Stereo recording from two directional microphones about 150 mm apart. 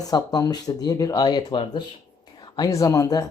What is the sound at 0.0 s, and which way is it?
Speech, 25° left (ahead or behind).